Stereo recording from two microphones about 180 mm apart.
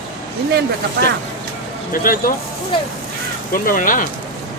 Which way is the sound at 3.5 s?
50° left (ahead or behind).